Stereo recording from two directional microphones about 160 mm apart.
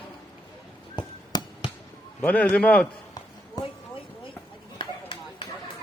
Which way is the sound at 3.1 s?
25° left (ahead or behind).